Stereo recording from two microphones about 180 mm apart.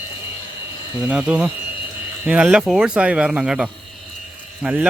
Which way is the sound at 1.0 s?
5° right (ahead or behind).